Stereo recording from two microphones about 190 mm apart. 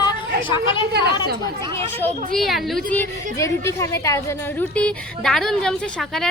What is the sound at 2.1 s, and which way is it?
Speech, 40° right (ahead or behind).